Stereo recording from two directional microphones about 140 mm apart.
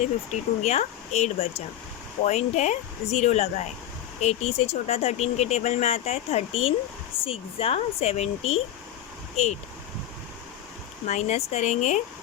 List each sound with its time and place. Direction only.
0.6 s speech: 50° left (ahead or behind)
11.0 s speech: 55° left (ahead or behind)